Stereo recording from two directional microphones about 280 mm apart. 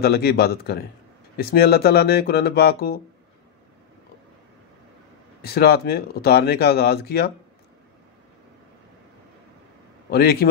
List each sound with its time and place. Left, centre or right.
0.0 s speech: left
5.4 s speech: left
10.1 s speech: left